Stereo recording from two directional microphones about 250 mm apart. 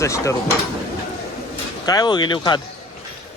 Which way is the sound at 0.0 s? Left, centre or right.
Centre.